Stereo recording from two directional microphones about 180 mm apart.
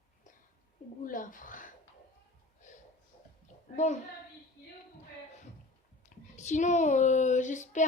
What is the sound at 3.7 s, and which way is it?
Speech, 40° left (ahead or behind).